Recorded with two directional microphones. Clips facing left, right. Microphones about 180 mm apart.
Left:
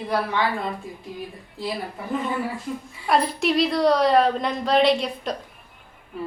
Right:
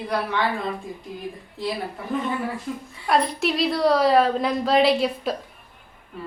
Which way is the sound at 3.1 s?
Centre (ahead or behind).